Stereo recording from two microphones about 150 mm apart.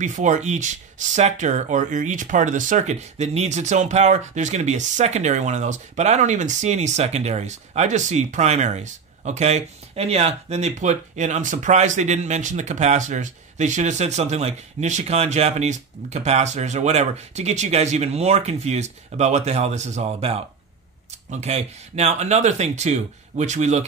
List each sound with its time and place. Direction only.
0.0 s speech: 55° right (ahead or behind)